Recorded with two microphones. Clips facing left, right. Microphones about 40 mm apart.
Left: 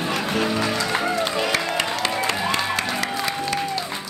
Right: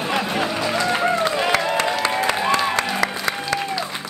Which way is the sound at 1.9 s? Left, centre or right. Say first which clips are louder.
Right 3 dB; right.